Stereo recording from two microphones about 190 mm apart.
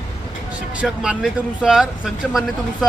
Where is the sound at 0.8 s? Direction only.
5° right (ahead or behind).